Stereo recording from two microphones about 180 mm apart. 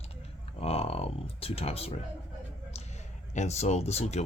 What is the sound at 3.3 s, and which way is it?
Speech, 40° left (ahead or behind).